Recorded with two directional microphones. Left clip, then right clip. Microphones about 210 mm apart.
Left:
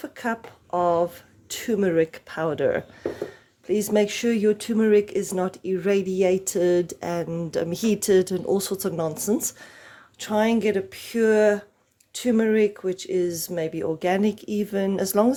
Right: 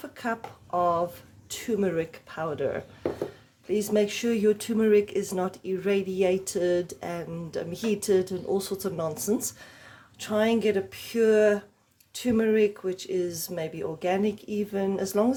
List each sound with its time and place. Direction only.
0.0 s speech: 20° left (ahead or behind)